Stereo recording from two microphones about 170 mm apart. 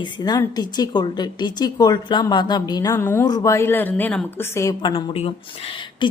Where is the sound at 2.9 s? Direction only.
15° left (ahead or behind).